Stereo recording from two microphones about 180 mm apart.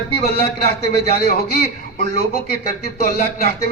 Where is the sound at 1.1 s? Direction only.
55° left (ahead or behind).